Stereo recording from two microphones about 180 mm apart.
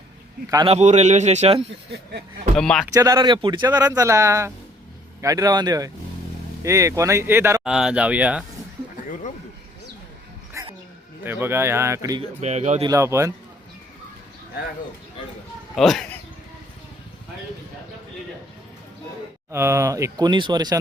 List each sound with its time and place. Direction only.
0.4 s speech: 20° right (ahead or behind)
0.7 s a man's voice: 40° right (ahead or behind)
2.6 s speech: 5° left (ahead or behind)
2.9 s speech: 20° right (ahead or behind)
11.2 s speech: 10° right (ahead or behind)
12.4 s a man's voice: 40° right (ahead or behind)
12.8 s speech: 15° right (ahead or behind)
15.7 s speech: centre (ahead or behind)
19.5 s speech: 15° right (ahead or behind)